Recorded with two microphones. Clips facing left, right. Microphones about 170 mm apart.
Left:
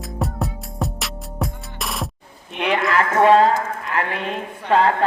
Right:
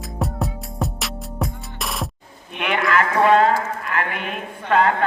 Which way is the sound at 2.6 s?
30° left (ahead or behind).